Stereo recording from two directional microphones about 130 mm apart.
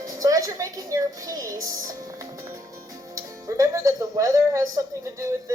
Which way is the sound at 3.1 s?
25° right (ahead or behind).